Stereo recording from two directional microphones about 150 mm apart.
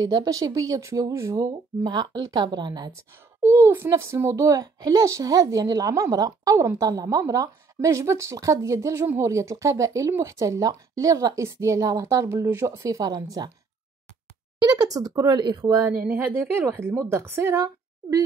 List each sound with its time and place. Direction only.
0.0 s a child's voice: 25° right (ahead or behind)
3.4 s a child's voice: 15° right (ahead or behind)
14.6 s a child's voice: 25° right (ahead or behind)
16.1 s speech: 15° right (ahead or behind)